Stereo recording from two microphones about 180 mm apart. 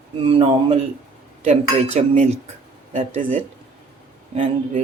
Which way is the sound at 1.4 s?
40° right (ahead or behind).